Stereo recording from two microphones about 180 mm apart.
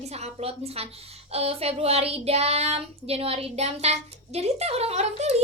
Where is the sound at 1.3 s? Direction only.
35° right (ahead or behind).